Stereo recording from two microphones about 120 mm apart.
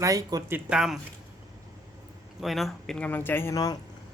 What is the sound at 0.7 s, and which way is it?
Speech, 5° right (ahead or behind).